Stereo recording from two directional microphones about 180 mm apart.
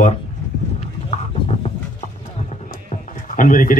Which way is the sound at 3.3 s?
50° left (ahead or behind).